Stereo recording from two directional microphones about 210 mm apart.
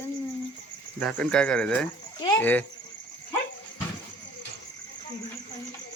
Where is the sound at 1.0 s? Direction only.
5° left (ahead or behind).